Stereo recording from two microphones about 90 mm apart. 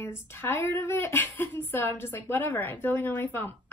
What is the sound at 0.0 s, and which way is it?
Speech, 25° left (ahead or behind).